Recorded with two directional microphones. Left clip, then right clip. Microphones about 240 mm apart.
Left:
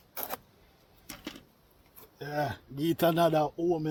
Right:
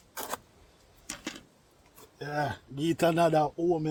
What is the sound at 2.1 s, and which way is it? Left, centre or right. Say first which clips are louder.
Speech: right 1 dB; centre.